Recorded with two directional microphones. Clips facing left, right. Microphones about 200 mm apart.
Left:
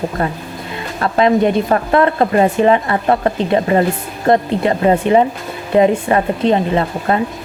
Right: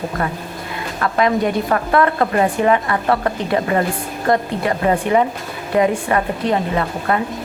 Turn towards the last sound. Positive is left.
turn(degrees=25)  # may be behind; listen again after turning